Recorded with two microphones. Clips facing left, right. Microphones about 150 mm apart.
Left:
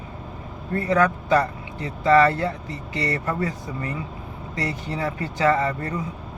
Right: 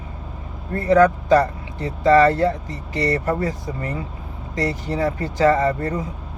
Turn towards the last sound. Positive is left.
turn(degrees=-35)  # may be behind; listen again after turning